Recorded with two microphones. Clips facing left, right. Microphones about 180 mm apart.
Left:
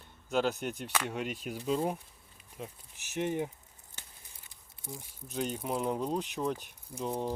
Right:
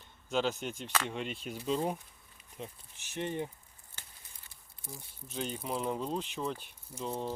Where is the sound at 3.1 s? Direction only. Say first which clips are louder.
Left 3 dB; 15° left (ahead or behind).